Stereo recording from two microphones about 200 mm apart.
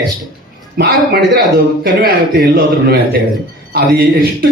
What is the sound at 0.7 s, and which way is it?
A man's voice, 50° right (ahead or behind).